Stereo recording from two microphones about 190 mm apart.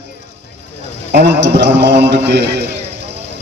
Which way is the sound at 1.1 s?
60° right (ahead or behind).